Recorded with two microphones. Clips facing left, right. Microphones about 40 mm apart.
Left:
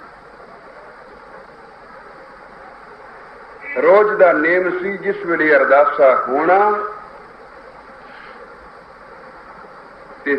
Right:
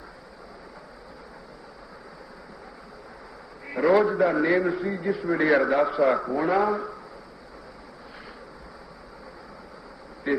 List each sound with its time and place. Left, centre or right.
3.6 s a man's voice: left
10.3 s bee: left